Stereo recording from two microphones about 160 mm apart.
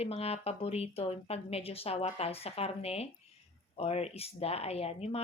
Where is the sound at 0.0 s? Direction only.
40° left (ahead or behind).